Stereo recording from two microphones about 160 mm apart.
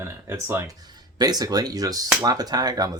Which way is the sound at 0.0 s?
15° right (ahead or behind).